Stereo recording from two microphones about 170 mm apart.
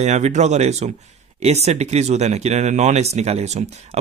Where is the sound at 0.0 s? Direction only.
40° right (ahead or behind).